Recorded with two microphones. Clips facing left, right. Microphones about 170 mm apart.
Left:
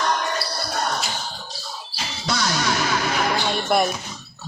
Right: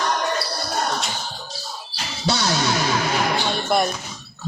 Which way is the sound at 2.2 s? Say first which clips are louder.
Right 2 dB; 30° right (ahead or behind).